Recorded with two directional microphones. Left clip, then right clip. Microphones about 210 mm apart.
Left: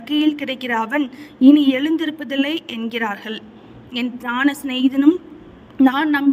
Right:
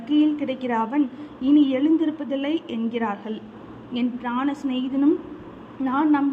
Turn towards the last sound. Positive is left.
turn(degrees=55)  # may be behind; listen again after turning